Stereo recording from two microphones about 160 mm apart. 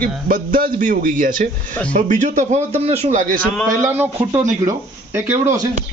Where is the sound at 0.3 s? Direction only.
60° right (ahead or behind).